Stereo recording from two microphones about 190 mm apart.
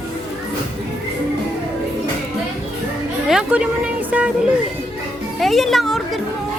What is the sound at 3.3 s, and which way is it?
A woman's voice, 5° right (ahead or behind).